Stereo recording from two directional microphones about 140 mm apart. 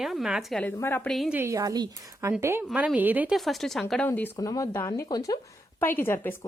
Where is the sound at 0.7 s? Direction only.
15° left (ahead or behind).